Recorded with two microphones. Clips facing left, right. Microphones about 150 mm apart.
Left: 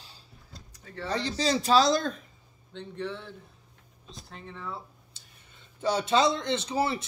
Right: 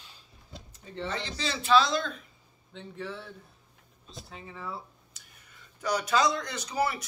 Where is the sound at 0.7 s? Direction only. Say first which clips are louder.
Right 2 dB; 20° right (ahead or behind).